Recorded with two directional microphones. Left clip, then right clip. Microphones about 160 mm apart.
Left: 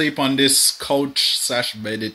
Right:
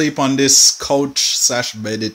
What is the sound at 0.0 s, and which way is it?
Speech, 10° right (ahead or behind).